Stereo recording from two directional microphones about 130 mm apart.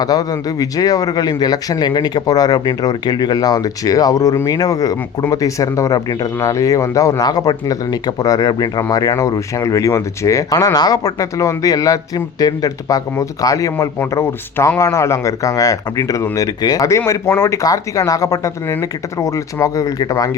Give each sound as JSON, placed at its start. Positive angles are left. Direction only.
{"t": 0.0, "sound": "speech", "side_deg": 30}